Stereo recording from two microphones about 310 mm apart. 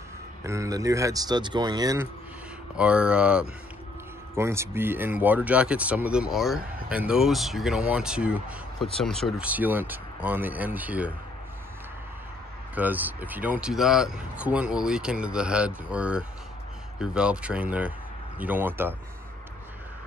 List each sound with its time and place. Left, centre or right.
0.5 s speech: centre
12.7 s speech: centre